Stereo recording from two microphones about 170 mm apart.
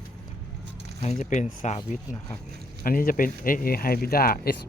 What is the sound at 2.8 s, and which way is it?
Speech, 55° left (ahead or behind).